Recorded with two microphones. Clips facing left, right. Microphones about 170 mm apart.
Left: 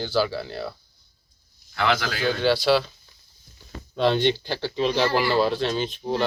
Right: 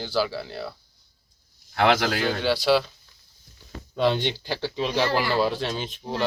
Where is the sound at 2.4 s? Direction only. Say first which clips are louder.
Left 2 dB; 10° right (ahead or behind).